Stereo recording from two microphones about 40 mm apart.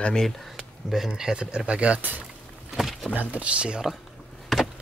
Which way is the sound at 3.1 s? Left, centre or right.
Right.